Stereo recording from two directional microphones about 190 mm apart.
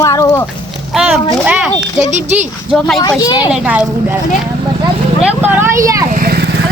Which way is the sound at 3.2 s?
20° left (ahead or behind).